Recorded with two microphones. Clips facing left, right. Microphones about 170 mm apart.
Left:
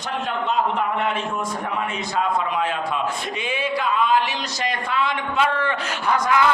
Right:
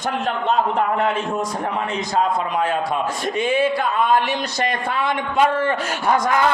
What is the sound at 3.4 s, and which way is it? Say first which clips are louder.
A man's voice: right 8 dB; 50° right (ahead or behind).